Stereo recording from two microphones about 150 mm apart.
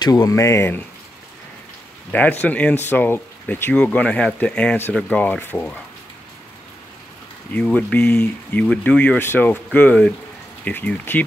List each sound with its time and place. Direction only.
0.0 s speech: 25° left (ahead or behind)
2.0 s speech: 10° left (ahead or behind)
7.5 s speech: 10° left (ahead or behind)